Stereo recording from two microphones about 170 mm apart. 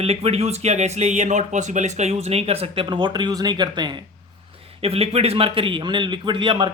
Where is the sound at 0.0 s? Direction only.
35° right (ahead or behind).